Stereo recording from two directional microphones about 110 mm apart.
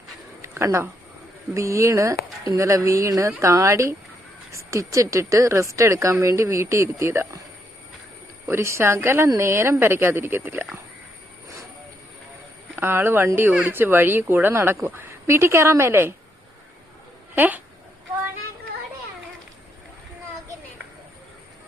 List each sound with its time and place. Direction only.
0.4 s a sound: 25° right (ahead or behind)
1.5 s a woman's voice: 25° right (ahead or behind)
8.4 s a woman's voice: 25° right (ahead or behind)
12.7 s a woman's voice: 20° right (ahead or behind)
17.3 s speech: 15° right (ahead or behind)